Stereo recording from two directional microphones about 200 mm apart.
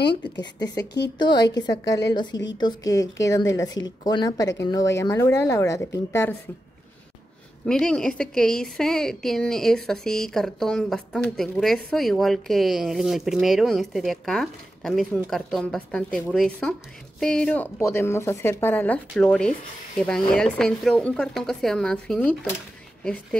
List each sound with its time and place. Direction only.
0.4 s a woman's voice: 20° left (ahead or behind)
7.6 s a woman's voice: 5° left (ahead or behind)